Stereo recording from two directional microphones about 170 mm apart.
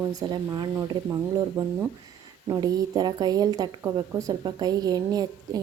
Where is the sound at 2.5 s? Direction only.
25° right (ahead or behind).